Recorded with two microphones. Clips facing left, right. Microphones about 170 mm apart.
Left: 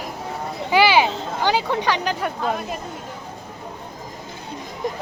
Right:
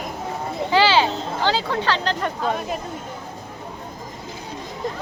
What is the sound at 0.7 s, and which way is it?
Speech, 15° left (ahead or behind).